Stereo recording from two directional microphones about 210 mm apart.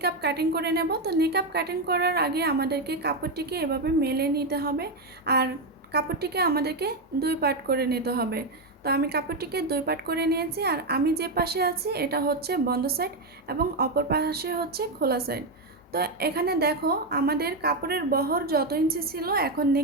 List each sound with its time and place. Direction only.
0.0 s a woman's voice: 50° right (ahead or behind)